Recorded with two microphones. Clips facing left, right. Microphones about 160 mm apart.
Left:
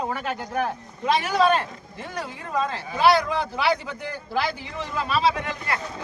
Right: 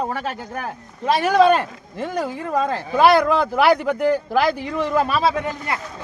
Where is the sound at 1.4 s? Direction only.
50° right (ahead or behind).